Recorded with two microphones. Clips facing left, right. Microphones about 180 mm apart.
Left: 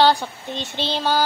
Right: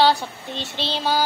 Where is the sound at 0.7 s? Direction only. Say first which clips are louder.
Left 2 dB; 45° left (ahead or behind).